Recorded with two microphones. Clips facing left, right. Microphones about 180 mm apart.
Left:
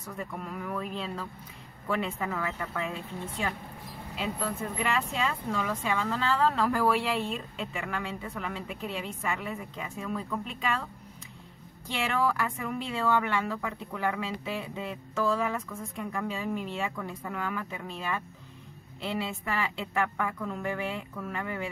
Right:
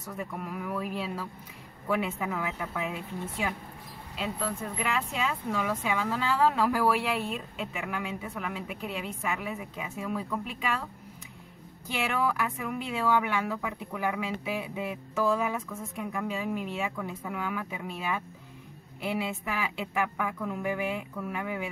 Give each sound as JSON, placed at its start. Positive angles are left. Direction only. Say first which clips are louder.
{"t": 0.2, "sound": "speech", "louder": "right 1 dB", "side_deg": -5}
{"t": 11.9, "sound": "speech", "louder": "left 1 dB", "side_deg": -5}